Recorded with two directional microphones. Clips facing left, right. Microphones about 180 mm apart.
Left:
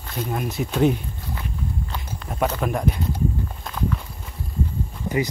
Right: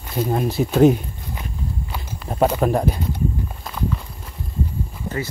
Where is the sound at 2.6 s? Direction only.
35° right (ahead or behind).